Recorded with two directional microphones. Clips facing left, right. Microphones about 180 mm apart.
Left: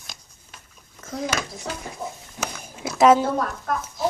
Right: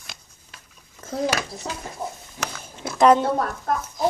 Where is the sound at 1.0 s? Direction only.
30° right (ahead or behind).